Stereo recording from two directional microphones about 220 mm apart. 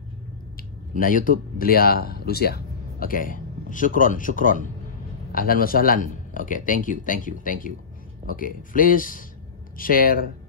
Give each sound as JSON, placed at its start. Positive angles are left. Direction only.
{"t": 0.9, "sound": "speech", "side_deg": 40}